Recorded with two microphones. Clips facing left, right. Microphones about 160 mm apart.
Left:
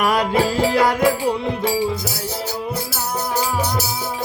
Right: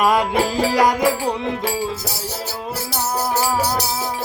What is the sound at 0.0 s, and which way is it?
Music, 20° right (ahead or behind).